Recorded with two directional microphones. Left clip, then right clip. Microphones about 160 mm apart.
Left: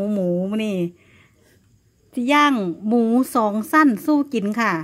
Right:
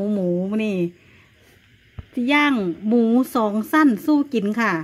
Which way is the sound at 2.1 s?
20° left (ahead or behind).